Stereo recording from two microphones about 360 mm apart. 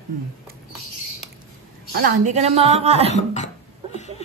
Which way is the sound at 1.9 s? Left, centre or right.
Right.